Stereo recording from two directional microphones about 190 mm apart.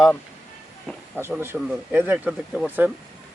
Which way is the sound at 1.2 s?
10° right (ahead or behind).